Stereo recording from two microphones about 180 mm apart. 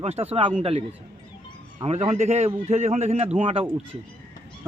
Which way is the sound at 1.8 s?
35° right (ahead or behind).